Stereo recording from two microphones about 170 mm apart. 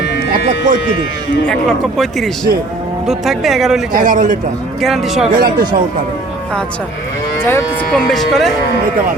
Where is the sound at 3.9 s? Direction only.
50° right (ahead or behind).